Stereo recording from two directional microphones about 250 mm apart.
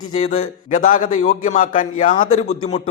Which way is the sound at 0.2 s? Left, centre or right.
Left.